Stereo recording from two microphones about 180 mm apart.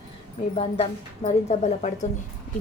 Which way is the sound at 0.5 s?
35° left (ahead or behind).